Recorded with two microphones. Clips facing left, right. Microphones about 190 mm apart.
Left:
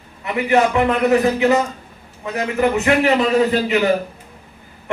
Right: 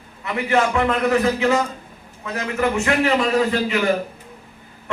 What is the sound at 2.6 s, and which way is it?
Speech, 20° left (ahead or behind).